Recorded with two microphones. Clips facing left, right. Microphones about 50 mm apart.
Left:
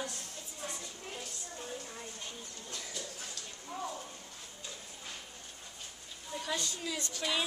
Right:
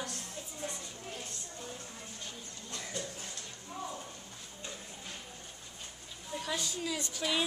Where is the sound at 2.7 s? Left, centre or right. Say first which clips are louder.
Right 4 dB; right.